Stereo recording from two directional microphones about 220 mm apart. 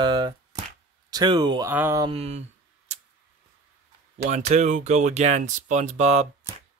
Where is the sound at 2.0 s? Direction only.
30° right (ahead or behind).